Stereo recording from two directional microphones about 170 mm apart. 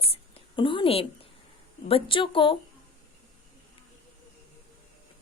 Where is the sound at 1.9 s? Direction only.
30° left (ahead or behind).